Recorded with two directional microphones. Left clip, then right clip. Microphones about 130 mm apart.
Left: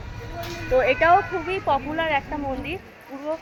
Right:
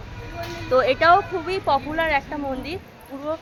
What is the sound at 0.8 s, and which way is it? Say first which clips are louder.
Speech: right 1 dB; 20° right (ahead or behind).